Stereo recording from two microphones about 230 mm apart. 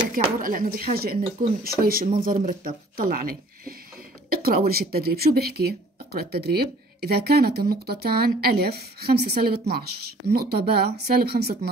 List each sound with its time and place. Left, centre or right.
0.4 s speech: right